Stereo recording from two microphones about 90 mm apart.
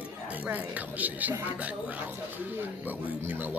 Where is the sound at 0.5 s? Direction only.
15° right (ahead or behind).